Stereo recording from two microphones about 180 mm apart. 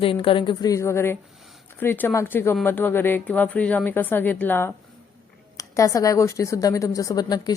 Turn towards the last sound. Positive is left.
turn(degrees=20)  # may be behind; listen again after turning